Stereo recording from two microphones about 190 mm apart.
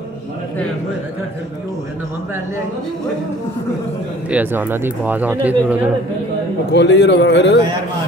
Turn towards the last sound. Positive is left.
turn(degrees=70)  # may be behind; listen again after turning